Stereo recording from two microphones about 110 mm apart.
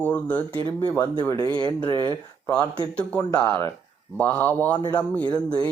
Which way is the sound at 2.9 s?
15° left (ahead or behind).